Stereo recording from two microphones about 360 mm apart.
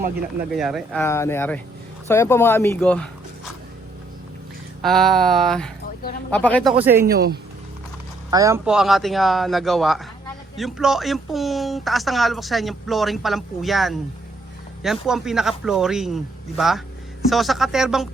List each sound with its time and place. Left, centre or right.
0.5 s speech: centre
4.8 s speech: centre
7.0 s speech: right
8.3 s speech: centre